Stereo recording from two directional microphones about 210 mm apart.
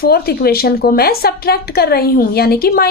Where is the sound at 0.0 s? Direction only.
50° left (ahead or behind).